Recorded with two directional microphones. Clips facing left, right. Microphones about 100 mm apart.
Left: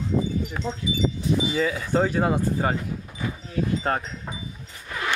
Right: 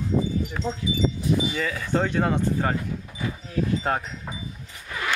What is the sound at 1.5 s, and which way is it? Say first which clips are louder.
Speech: left 2 dB; 15° left (ahead or behind).